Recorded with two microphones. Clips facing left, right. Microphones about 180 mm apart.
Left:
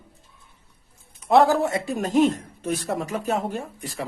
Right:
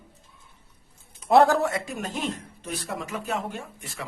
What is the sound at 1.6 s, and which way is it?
Speech, 30° left (ahead or behind).